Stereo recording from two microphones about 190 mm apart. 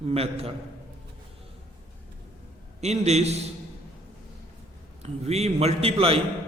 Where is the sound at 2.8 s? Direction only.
35° right (ahead or behind).